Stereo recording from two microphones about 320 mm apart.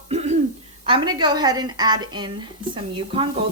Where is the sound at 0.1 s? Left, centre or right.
Centre.